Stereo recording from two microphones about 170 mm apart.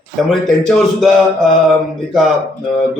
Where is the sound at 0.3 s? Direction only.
Centre (ahead or behind).